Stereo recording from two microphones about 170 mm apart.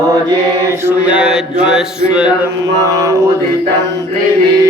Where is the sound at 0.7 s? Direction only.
15° right (ahead or behind).